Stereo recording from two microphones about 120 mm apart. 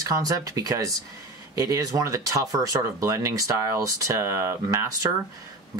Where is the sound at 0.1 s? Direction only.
30° right (ahead or behind).